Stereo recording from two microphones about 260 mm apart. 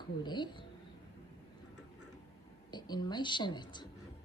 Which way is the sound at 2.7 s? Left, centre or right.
Centre.